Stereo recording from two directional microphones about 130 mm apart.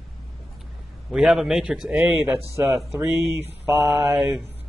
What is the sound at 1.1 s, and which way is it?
Speech, 5° right (ahead or behind).